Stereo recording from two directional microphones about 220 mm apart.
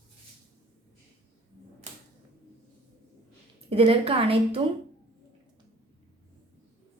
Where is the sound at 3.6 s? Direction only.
25° right (ahead or behind).